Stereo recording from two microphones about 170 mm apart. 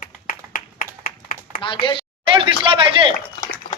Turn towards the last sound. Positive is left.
turn(degrees=20)  # may be behind; listen again after turning